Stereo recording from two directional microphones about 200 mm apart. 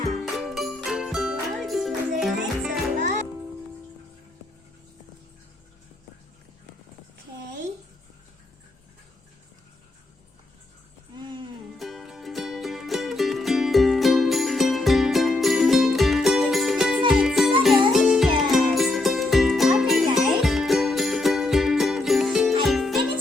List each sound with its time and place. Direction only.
0.1 s music: centre (ahead or behind)
11.2 s music: 20° right (ahead or behind)
11.8 s music: centre (ahead or behind)